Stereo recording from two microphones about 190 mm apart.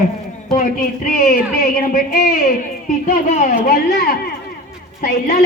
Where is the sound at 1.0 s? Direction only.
50° left (ahead or behind).